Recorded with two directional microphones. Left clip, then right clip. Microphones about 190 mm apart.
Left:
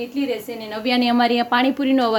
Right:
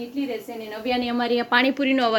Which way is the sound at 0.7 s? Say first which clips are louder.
Left 5 dB; 50° left (ahead or behind).